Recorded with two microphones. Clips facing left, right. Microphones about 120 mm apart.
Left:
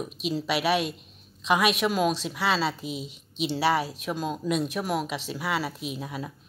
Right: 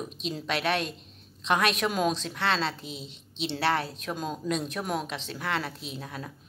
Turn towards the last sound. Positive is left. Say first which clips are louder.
# left 4 dB
turn(degrees=10)  # may be behind; listen again after turning